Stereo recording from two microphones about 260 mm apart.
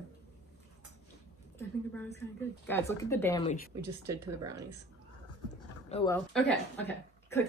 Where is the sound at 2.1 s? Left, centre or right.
Centre.